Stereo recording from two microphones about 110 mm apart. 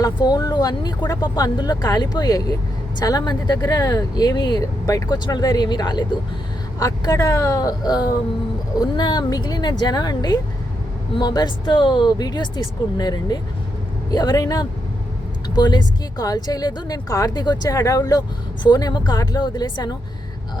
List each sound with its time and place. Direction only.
0.0 s speech: 40° left (ahead or behind)